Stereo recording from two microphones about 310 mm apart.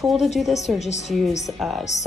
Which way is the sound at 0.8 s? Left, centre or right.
Left.